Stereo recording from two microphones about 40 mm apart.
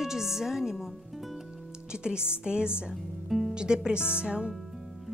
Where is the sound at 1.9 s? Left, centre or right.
Right.